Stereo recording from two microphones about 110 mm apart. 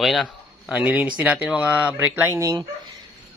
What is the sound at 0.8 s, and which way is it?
Speech, 15° right (ahead or behind).